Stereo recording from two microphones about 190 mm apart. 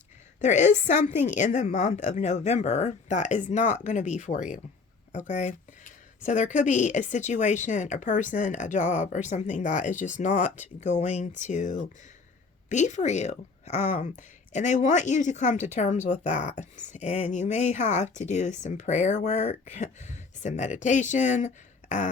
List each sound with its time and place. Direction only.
0.4 s speech: 40° left (ahead or behind)